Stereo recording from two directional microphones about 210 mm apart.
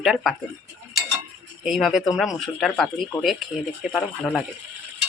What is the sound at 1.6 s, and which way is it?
A man's voice, centre (ahead or behind).